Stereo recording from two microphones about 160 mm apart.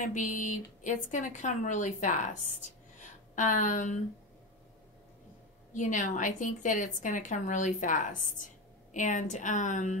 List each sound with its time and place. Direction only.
0.0 s a woman's voice: 50° left (ahead or behind)
5.7 s a woman's voice: 50° left (ahead or behind)